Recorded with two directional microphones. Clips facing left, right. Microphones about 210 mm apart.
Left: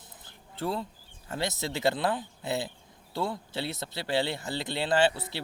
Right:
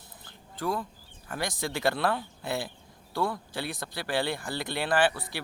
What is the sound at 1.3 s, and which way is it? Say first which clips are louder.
Speech: even; 25° left (ahead or behind).